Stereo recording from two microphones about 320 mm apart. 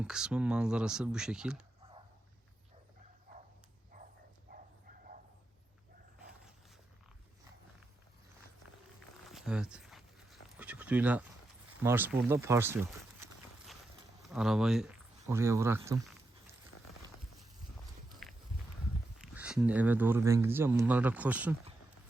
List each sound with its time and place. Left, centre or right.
0.0 s speech: centre
3.9 s a sound: right
9.2 s a sound: centre
11.8 s speech: centre
18.1 s walk: centre
19.2 s speech: centre